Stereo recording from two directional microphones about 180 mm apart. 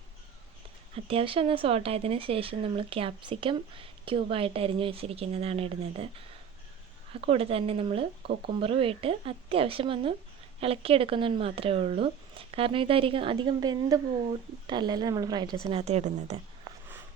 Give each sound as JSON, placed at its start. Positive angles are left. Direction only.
{"t": 1.0, "sound": "speech", "side_deg": -30}
{"t": 7.1, "sound": "speech", "side_deg": -30}
{"t": 15.6, "sound": "speech", "side_deg": -35}